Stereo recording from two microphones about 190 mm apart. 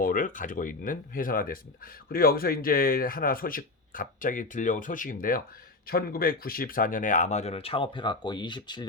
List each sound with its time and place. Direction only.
0.0 s speech: 45° left (ahead or behind); by 8.9 s 25° left (ahead or behind)